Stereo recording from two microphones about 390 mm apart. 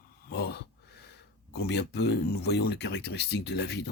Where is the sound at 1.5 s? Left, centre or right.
Left.